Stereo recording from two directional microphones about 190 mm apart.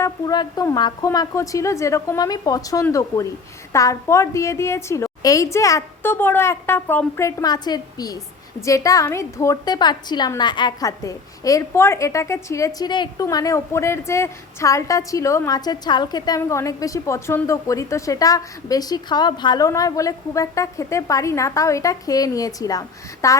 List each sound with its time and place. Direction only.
0.0 s a woman's voice: 20° left (ahead or behind)